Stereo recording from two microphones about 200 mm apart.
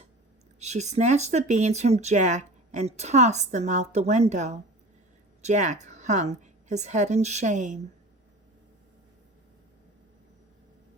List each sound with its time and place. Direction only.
0.6 s a woman's voice: 35° right (ahead or behind)